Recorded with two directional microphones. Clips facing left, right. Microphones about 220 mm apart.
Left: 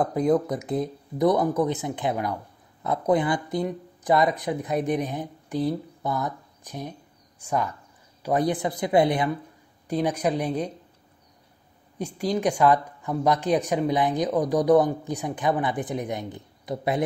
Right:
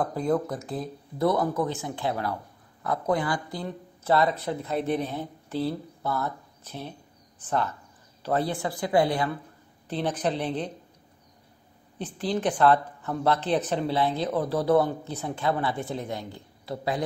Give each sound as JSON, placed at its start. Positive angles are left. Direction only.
{"t": 0.0, "sound": "speech", "side_deg": 20}
{"t": 12.0, "sound": "speech", "side_deg": 10}